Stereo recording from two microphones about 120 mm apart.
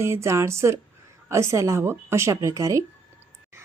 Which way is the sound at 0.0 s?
25° right (ahead or behind).